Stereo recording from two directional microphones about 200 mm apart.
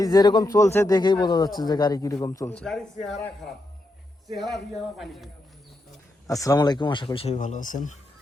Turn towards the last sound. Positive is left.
turn(degrees=40)  # may be behind; listen again after turning